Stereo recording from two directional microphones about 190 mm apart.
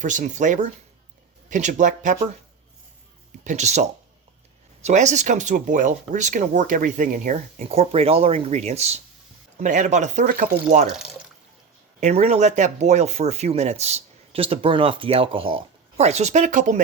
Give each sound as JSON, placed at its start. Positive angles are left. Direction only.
{"t": 0.0, "sound": "speech", "side_deg": -40}
{"t": 3.4, "sound": "speech", "side_deg": -40}
{"t": 11.9, "sound": "speech", "side_deg": -35}